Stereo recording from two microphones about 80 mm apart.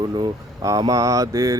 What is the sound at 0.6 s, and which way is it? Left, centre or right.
Speech, right.